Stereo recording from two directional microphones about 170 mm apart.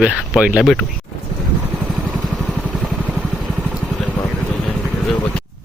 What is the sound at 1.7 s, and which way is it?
Vehicle, 5° right (ahead or behind).